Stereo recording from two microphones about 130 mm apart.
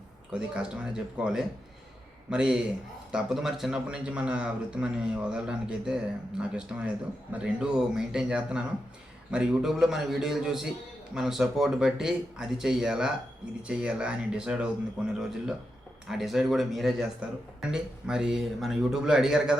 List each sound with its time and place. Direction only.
0.3 s a man's voice: 5° right (ahead or behind)